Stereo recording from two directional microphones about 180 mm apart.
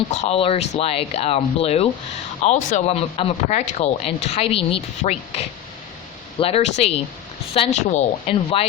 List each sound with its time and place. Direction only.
0.1 s speech: 35° left (ahead or behind)